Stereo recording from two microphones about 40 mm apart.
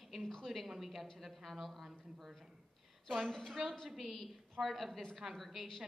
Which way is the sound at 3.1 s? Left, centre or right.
Centre.